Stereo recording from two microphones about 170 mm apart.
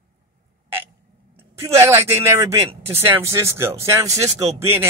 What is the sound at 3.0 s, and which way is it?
Speech, 15° right (ahead or behind).